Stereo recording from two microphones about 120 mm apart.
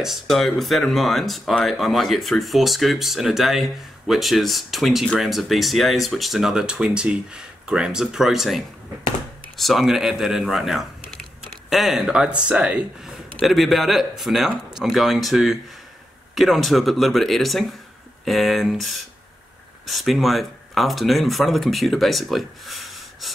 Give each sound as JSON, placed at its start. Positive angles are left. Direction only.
{"t": 0.0, "sound": "speech", "side_deg": 0}